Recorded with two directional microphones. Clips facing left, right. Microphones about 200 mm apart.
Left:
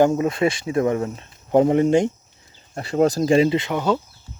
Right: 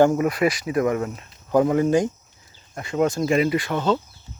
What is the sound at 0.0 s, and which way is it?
Speech, 25° left (ahead or behind).